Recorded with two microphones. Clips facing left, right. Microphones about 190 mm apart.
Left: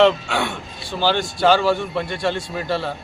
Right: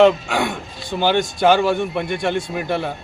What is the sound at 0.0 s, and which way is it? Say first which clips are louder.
A man's voice: right 2 dB; 10° right (ahead or behind).